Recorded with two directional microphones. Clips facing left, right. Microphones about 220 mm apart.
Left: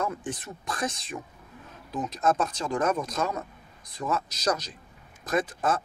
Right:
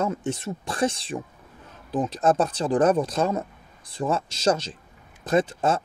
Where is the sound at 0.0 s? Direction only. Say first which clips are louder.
Right 5 dB; 25° right (ahead or behind).